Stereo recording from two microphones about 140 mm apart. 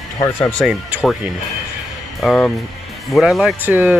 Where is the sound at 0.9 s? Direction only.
10° right (ahead or behind).